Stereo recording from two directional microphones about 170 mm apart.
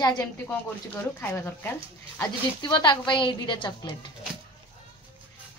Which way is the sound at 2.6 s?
30° left (ahead or behind).